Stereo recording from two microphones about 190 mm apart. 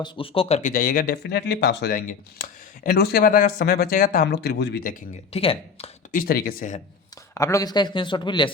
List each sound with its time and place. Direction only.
0.0 s speech: 30° left (ahead or behind); by 5.0 s 50° left (ahead or behind)
5.3 s speech: 30° left (ahead or behind)
6.1 s speech: 50° left (ahead or behind)
7.3 s speech: 15° left (ahead or behind)